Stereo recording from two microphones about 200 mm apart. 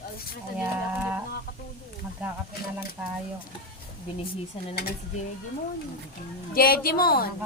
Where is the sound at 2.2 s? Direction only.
5° right (ahead or behind).